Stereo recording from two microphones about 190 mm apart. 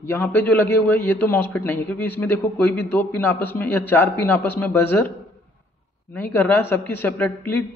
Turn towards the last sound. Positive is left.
turn(degrees=10)  # may be behind; listen again after turning